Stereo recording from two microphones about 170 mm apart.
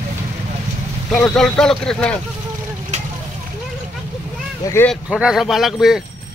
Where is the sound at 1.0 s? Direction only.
Centre (ahead or behind).